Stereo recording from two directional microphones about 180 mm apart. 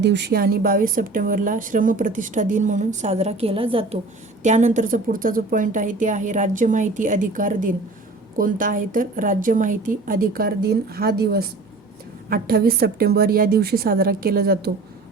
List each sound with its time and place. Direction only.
0.0 s speech: 75° right (ahead or behind); by 3.8 s 30° right (ahead or behind)
4.4 s a woman's voice: 40° right (ahead or behind); by 14.7 s 60° right (ahead or behind)